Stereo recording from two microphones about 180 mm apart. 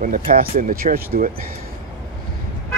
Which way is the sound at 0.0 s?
50° right (ahead or behind).